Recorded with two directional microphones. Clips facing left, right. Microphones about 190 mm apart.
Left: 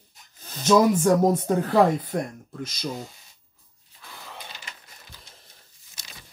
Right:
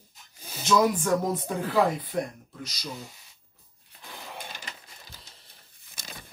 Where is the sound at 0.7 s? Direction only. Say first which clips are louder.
Left 5 dB; 45° left (ahead or behind).